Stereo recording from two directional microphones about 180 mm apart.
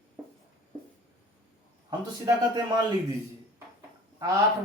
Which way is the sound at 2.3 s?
20° right (ahead or behind).